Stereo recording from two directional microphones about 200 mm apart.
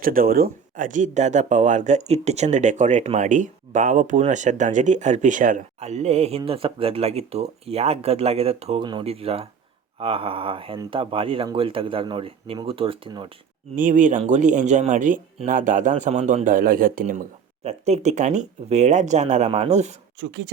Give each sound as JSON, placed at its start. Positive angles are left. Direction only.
{"t": 0.0, "sound": "speech", "side_deg": -45}
{"t": 13.7, "sound": "speech", "side_deg": -40}